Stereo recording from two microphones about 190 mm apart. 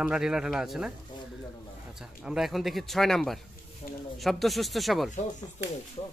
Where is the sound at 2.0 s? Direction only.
5° right (ahead or behind).